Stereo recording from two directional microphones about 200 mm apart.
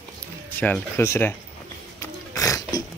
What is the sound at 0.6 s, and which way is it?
Speech, 10° left (ahead or behind).